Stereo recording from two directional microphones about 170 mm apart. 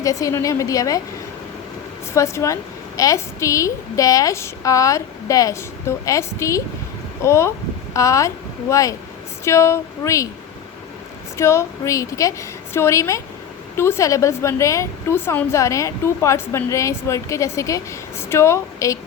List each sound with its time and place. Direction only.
0.0 s a woman's voice: 20° left (ahead or behind)
2.1 s a woman's voice: 15° left (ahead or behind)
11.3 s a woman's voice: 15° left (ahead or behind)